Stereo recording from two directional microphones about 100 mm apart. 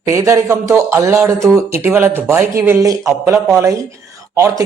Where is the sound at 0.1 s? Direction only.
30° right (ahead or behind).